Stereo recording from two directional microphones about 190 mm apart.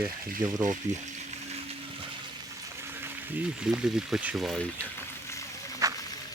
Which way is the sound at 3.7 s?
5° right (ahead or behind).